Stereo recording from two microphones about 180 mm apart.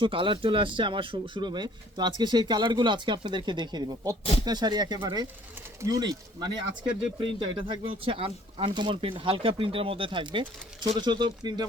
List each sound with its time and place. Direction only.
0.0 s speech: 30° right (ahead or behind)
4.2 s speech: 30° left (ahead or behind)
4.4 s speech: 25° right (ahead or behind)